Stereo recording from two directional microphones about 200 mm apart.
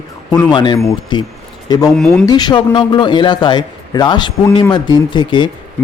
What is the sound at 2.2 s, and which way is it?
Speech, 20° left (ahead or behind).